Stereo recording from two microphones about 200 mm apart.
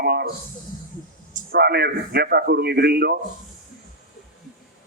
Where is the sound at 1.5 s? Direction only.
55° right (ahead or behind).